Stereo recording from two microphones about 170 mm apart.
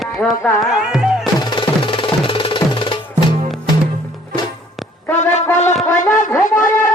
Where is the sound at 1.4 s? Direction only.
25° left (ahead or behind).